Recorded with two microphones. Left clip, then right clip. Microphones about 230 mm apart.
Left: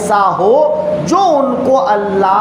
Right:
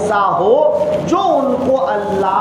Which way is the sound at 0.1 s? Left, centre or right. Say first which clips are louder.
Left 4 dB; left.